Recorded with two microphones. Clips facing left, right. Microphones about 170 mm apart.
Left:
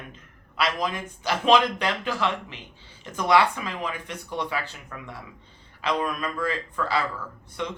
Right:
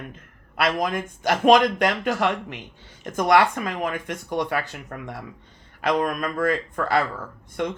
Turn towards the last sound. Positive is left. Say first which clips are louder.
# right 5 dB
turn(degrees=-55)  # may be behind; listen again after turning